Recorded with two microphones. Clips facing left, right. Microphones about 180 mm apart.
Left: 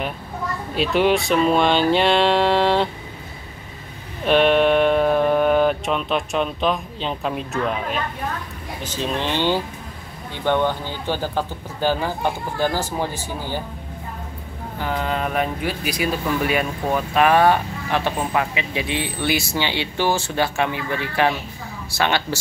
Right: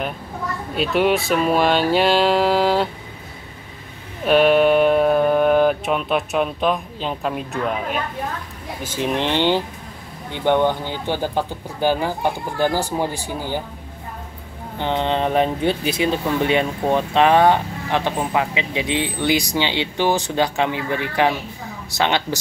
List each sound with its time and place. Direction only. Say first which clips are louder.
0.7 s speech: even; centre (ahead or behind)
4.2 s speech: right 2 dB; 5° right (ahead or behind)
14.8 s speech: right 4 dB; 25° right (ahead or behind)